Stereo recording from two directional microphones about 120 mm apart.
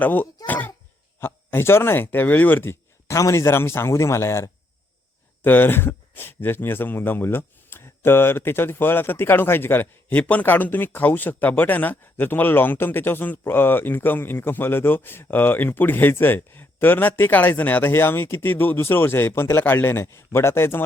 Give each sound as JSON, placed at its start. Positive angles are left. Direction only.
{"t": 0.0, "sound": "speech", "side_deg": 15}